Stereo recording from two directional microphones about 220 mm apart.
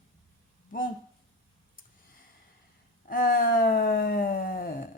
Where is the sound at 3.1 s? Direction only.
40° left (ahead or behind).